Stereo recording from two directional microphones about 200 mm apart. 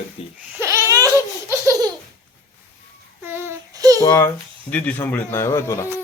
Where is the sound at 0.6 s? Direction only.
15° right (ahead or behind).